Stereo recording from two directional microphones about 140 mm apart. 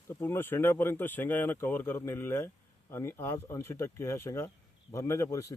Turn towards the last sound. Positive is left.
turn(degrees=20)  # may be behind; listen again after turning